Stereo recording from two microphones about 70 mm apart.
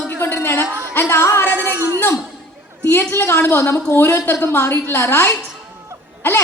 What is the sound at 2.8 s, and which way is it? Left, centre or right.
A woman's voice, left.